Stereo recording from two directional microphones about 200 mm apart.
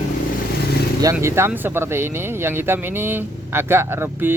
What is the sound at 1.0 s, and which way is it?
Speech, 15° right (ahead or behind).